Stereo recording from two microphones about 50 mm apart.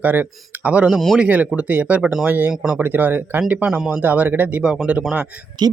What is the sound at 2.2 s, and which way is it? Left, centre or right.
Speech, right.